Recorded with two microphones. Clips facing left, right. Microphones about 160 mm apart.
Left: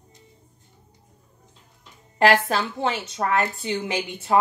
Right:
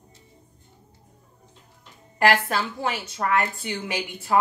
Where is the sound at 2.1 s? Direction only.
30° left (ahead or behind).